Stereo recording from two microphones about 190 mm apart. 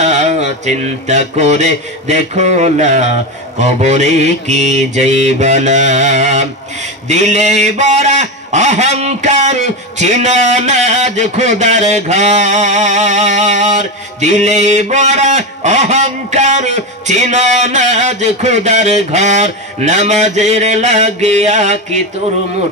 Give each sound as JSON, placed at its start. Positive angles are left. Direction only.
{"t": 0.0, "sound": "a man's voice", "side_deg": -40}